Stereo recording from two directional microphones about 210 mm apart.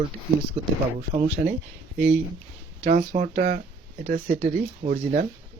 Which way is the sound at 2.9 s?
35° right (ahead or behind).